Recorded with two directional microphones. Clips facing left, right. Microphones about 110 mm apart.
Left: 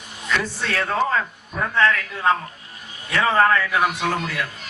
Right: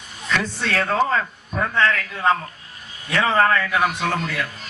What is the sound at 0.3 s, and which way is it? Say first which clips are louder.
Speech: right 1 dB; 15° left (ahead or behind).